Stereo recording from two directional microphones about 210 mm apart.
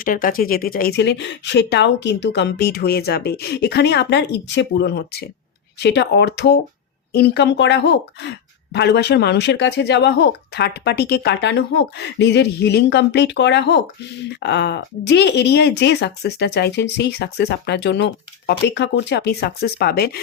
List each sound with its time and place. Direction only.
0.0 s speech: 40° left (ahead or behind)